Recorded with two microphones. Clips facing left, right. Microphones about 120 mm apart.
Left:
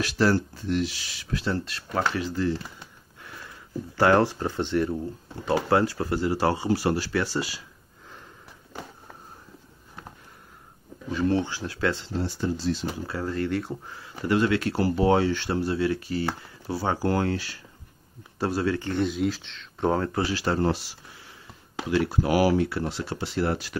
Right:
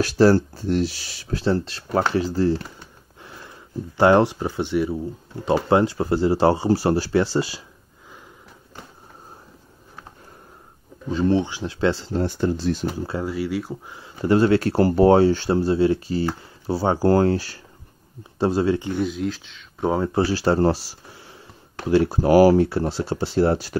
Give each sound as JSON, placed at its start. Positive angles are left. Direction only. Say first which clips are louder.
{"t": 0.0, "sound": "speech", "louder": "right 7 dB", "side_deg": -35}
{"t": 5.4, "sound": "speech", "louder": "right 4 dB", "side_deg": -20}
{"t": 11.1, "sound": "speech", "louder": "right 4 dB", "side_deg": -25}
{"t": 12.1, "sound": "speech", "louder": "right 6 dB", "side_deg": -55}
{"t": 13.2, "sound": "speech", "louder": "even", "side_deg": -10}
{"t": 13.8, "sound": "a sound", "louder": "right 2 dB", "side_deg": -20}
{"t": 14.2, "sound": "speech", "louder": "right 6 dB", "side_deg": -35}
{"t": 18.4, "sound": "speech", "louder": "right 6 dB", "side_deg": -25}
{"t": 18.9, "sound": "speech", "louder": "right 1 dB", "side_deg": 0}
{"t": 20.1, "sound": "speech", "louder": "right 6 dB", "side_deg": -35}